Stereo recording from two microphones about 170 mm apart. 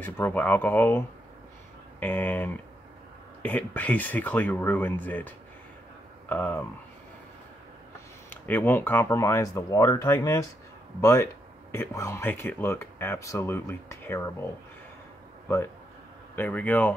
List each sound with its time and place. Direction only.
0.0 s speech: 10° left (ahead or behind)
8.3 s speech: 10° left (ahead or behind)
15.4 s a man's voice: 15° left (ahead or behind)